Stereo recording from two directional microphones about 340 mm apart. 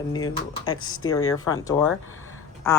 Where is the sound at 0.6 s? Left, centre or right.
Left.